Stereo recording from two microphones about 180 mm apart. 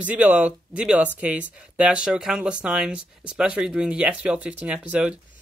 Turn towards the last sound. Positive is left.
turn(degrees=-5)  # may be behind; listen again after turning